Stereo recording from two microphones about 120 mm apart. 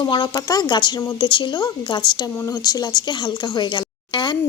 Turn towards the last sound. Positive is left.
turn(degrees=40)  # may be behind; listen again after turning